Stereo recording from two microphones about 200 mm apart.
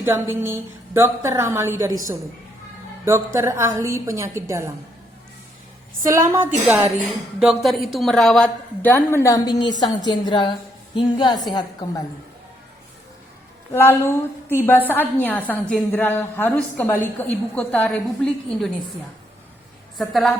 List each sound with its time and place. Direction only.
0.0 s a woman's voice: 10° right (ahead or behind)
3.0 s a woman's voice: 15° right (ahead or behind)
6.0 s a woman's voice: 15° right (ahead or behind)
7.3 s a woman's voice: centre (ahead or behind); by 12.0 s 20° left (ahead or behind)
13.7 s a woman's voice: 10° left (ahead or behind)
20.0 s a woman's voice: centre (ahead or behind)